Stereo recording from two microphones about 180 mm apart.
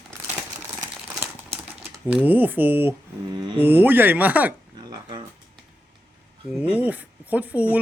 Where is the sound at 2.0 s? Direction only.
10° right (ahead or behind).